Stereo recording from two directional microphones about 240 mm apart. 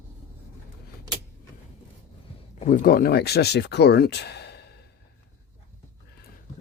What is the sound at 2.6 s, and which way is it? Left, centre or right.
Speech, left.